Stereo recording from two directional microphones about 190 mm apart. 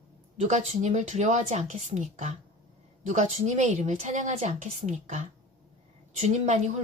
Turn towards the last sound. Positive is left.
turn(degrees=-35)  # may be behind; listen again after turning